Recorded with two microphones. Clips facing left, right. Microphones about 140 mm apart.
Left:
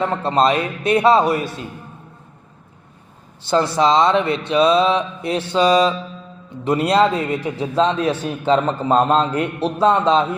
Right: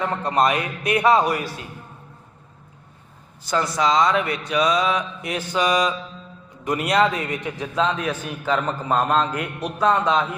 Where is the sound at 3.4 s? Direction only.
30° left (ahead or behind).